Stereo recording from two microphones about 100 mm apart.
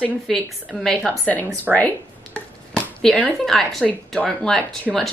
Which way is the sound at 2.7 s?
10° left (ahead or behind).